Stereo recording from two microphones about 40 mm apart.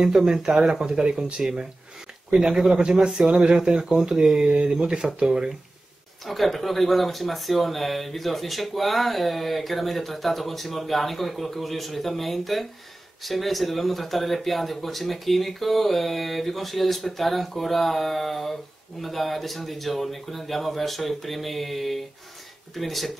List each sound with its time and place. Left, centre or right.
0.0 s speech: centre
2.3 s speech: centre
2.8 s speech: right
6.2 s speech: centre